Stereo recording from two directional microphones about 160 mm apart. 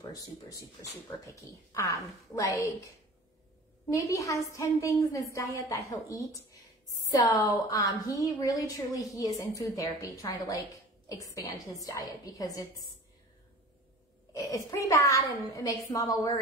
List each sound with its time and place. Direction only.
0.0 s a woman's voice: 20° left (ahead or behind)
3.9 s a woman's voice: 20° left (ahead or behind)
14.3 s a woman's voice: 20° left (ahead or behind)